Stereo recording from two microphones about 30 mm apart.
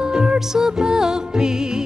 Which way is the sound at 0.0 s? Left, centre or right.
Right.